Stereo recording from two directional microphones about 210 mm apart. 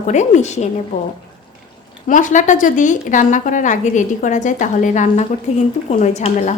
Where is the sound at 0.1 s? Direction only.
35° left (ahead or behind).